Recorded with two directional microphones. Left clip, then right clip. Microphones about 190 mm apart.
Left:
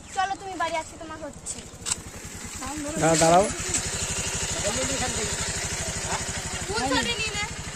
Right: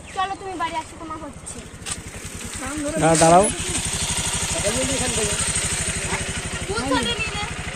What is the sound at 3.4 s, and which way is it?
Vehicle, 40° left (ahead or behind).